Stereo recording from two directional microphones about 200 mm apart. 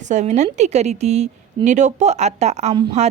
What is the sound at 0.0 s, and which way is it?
Speech, 35° right (ahead or behind).